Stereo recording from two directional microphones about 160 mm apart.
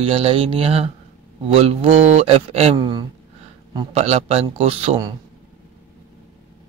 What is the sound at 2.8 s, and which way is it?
Speech, 30° right (ahead or behind).